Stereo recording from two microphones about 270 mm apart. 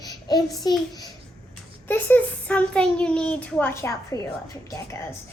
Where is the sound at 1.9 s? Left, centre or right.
Centre.